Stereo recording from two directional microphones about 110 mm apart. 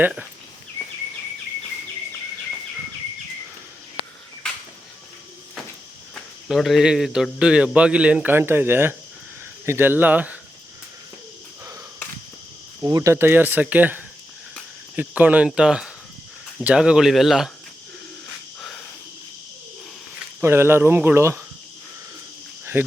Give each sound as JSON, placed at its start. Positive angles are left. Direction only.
{"t": 6.5, "sound": "a man's voice", "side_deg": 0}
{"t": 12.8, "sound": "a man's voice", "side_deg": -30}
{"t": 18.6, "sound": "a sound", "side_deg": 5}
{"t": 20.4, "sound": "speech", "side_deg": -20}
{"t": 22.7, "sound": "speech", "side_deg": -20}